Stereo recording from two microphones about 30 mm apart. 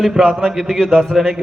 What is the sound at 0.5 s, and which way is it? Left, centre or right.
Speech, centre.